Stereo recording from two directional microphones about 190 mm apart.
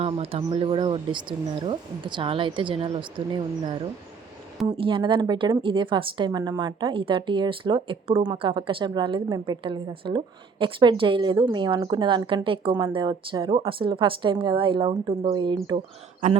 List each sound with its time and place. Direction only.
0.0 s a woman's voice: 30° right (ahead or behind)
4.7 s a woman's voice: 25° right (ahead or behind)